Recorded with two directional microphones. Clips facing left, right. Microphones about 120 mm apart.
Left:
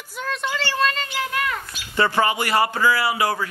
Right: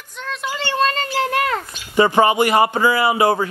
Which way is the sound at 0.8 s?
35° right (ahead or behind).